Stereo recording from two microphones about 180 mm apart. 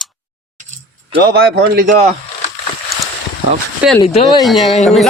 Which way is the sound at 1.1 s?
60° right (ahead or behind).